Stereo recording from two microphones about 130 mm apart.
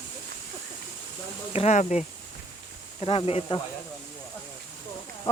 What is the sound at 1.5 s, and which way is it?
Speech, 60° left (ahead or behind).